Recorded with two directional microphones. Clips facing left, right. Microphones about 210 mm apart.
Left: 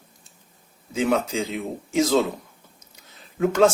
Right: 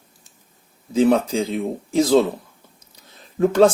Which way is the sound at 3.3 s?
35° right (ahead or behind).